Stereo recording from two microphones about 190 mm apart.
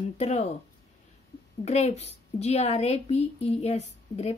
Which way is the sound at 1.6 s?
35° left (ahead or behind).